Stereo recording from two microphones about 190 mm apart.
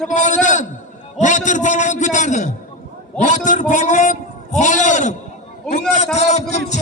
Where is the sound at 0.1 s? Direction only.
40° left (ahead or behind).